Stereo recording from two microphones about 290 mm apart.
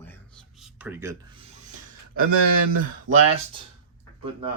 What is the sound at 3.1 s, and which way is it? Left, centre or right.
Speech, right.